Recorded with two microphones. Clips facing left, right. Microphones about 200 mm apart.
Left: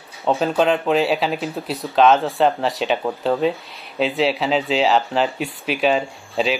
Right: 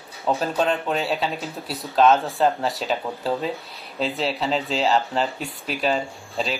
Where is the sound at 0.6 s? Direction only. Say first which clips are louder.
Left 5 dB; 90° left.